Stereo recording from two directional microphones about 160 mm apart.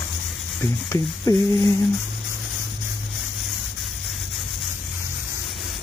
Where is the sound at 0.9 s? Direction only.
20° left (ahead or behind).